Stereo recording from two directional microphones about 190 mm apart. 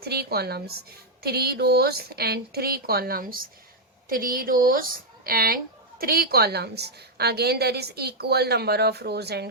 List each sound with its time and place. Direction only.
0.0 s a woman's voice: 55° right (ahead or behind)